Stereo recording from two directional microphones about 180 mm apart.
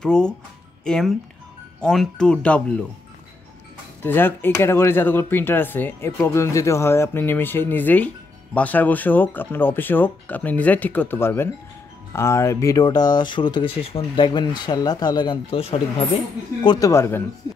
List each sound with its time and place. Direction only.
0.0 s speech: 5° left (ahead or behind)
4.0 s speech: 10° left (ahead or behind); by 16.1 s 30° left (ahead or behind)
16.6 s speech: 20° left (ahead or behind)
17.4 s a sound: 20° left (ahead or behind)